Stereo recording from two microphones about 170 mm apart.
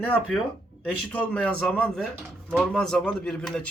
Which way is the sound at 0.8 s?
10° left (ahead or behind).